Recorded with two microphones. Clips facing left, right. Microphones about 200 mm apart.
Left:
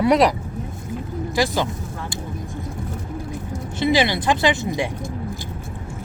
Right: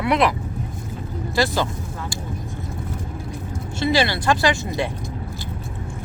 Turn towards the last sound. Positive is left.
turn(degrees=15)  # may be behind; listen again after turning